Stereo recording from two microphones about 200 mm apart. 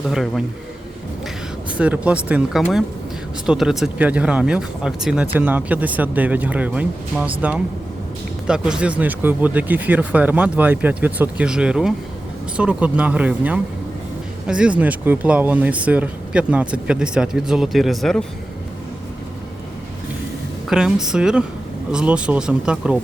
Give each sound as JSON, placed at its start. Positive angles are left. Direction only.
{"t": 0.1, "sound": "speech", "side_deg": 0}
{"t": 1.8, "sound": "speech", "side_deg": -5}
{"t": 8.4, "sound": "speech", "side_deg": -5}
{"t": 20.7, "sound": "speech", "side_deg": -5}